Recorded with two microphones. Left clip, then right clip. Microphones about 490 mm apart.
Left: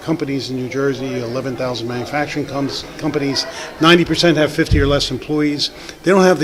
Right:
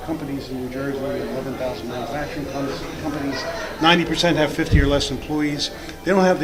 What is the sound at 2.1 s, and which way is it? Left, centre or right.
Speech, left.